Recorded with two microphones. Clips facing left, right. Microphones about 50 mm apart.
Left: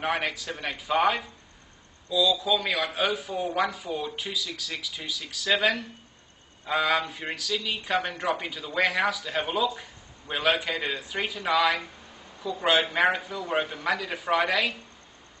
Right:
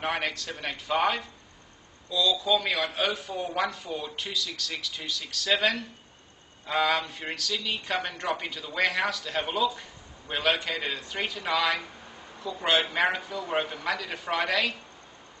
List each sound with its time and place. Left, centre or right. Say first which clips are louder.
0.0 s speech: left 2 dB; centre